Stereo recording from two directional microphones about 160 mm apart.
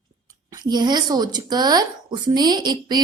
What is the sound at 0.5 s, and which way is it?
A woman's voice, 25° right (ahead or behind).